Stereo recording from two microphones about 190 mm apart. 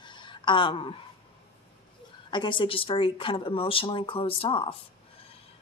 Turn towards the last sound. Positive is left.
turn(degrees=30)  # may be behind; listen again after turning